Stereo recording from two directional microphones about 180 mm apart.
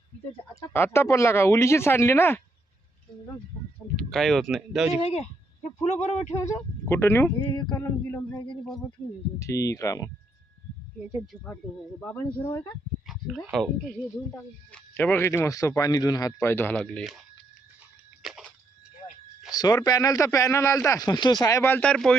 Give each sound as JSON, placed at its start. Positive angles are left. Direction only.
{"t": 0.5, "sound": "speech", "side_deg": 15}
{"t": 3.9, "sound": "speech", "side_deg": 0}
{"t": 5.0, "sound": "speech", "side_deg": 35}
{"t": 6.4, "sound": "speech", "side_deg": 15}
{"t": 7.5, "sound": "speech", "side_deg": 25}
{"t": 9.4, "sound": "speech", "side_deg": 15}
{"t": 11.0, "sound": "speech", "side_deg": 0}
{"t": 13.1, "sound": "a sound", "side_deg": 0}
{"t": 14.3, "sound": "speech", "side_deg": 5}
{"t": 18.2, "sound": "a sound", "side_deg": 0}
{"t": 19.5, "sound": "speech", "side_deg": 20}